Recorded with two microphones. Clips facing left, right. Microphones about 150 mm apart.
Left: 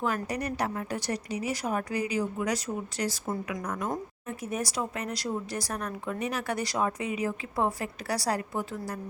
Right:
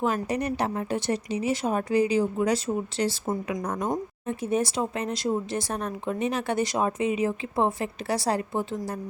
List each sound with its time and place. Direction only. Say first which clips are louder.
0.3 s speech: right 4 dB; 20° right (ahead or behind)